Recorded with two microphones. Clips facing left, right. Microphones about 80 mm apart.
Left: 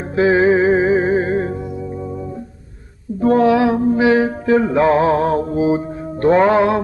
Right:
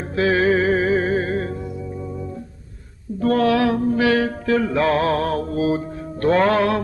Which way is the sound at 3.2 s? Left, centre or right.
Left.